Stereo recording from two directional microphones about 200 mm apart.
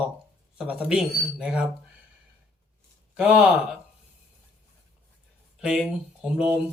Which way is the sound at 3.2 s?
5° right (ahead or behind).